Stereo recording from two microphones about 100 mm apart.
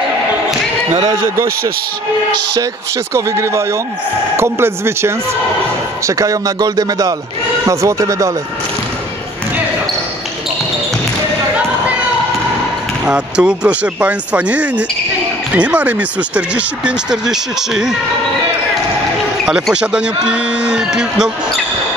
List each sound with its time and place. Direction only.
1.1 s speech: 25° right (ahead or behind)
3.1 s speech: 30° right (ahead or behind)
13.0 s speech: 10° right (ahead or behind)
19.7 s speech: 10° right (ahead or behind)